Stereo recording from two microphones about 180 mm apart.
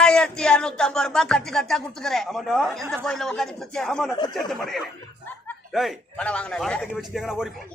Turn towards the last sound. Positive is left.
turn(degrees=0)  # may be behind; listen again after turning